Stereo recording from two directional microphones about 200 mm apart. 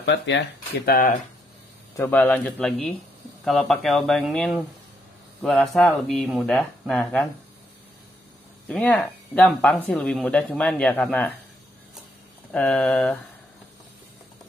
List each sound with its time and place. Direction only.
0.0 s speech: 60° left (ahead or behind)
2.0 s speech: 10° left (ahead or behind)
8.6 s speech: 5° left (ahead or behind)
12.5 s speech: 5° left (ahead or behind)